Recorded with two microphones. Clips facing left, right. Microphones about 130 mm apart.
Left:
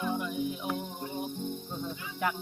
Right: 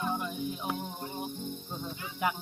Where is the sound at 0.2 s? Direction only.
30° right (ahead or behind).